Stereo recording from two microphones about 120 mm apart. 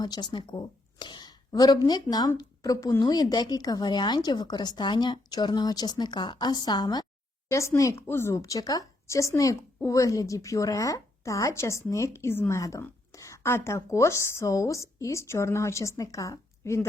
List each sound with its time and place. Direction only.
0.0 s a woman's voice: 35° left (ahead or behind)